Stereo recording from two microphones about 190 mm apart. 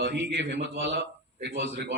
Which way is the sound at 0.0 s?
60° right (ahead or behind).